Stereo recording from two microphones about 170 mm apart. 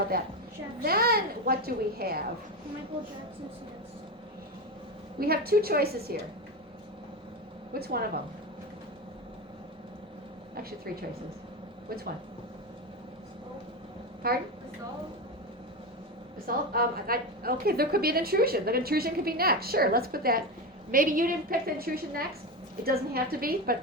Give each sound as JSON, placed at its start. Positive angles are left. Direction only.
{"t": 0.1, "sound": "a woman's voice", "side_deg": -60}
{"t": 5.2, "sound": "a woman's voice", "side_deg": -65}
{"t": 7.7, "sound": "a woman's voice", "side_deg": -65}
{"t": 14.2, "sound": "a woman's voice", "side_deg": -60}
{"t": 16.7, "sound": "a woman's voice", "side_deg": -60}